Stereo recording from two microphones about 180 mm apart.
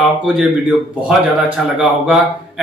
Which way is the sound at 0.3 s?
5° right (ahead or behind).